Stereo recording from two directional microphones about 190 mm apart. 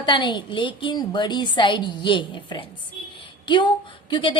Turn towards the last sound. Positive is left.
turn(degrees=25)  # may be behind; listen again after turning